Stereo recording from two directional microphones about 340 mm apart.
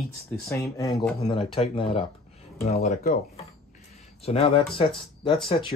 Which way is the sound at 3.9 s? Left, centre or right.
Centre.